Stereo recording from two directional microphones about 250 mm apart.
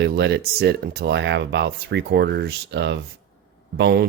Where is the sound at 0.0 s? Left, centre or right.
Right.